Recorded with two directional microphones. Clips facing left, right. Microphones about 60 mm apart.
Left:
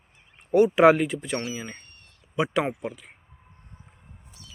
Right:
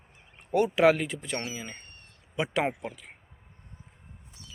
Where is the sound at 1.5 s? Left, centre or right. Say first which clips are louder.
Left 4 dB; centre.